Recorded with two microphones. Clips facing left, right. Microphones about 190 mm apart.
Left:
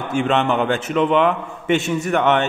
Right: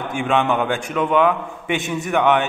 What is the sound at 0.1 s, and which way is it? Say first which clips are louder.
A man's voice: left 1 dB; 10° right (ahead or behind).